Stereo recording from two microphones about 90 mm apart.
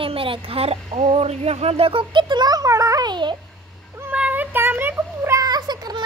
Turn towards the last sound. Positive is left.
turn(degrees=-50)  # may be behind; listen again after turning